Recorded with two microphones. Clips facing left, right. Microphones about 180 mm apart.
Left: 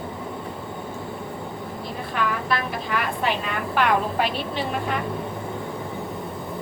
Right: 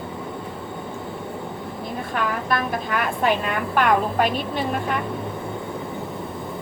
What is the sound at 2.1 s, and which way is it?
Vehicle, 50° right (ahead or behind).